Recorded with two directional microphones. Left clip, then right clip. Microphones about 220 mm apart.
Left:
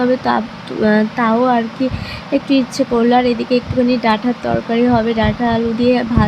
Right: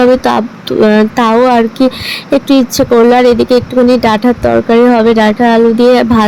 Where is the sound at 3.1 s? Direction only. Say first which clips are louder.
Right 7 dB; 30° right (ahead or behind).